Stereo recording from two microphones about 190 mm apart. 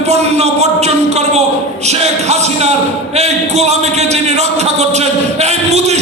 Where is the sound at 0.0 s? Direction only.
35° right (ahead or behind).